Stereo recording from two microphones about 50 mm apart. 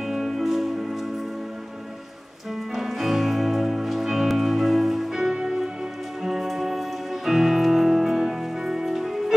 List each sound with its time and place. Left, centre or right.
0.1 s music: centre
2.7 s music: centre